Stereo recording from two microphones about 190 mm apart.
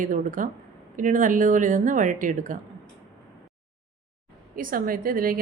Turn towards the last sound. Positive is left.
turn(degrees=-50)  # may be behind; listen again after turning